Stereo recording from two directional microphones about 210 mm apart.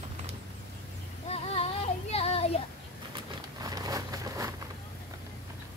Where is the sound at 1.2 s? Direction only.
30° left (ahead or behind).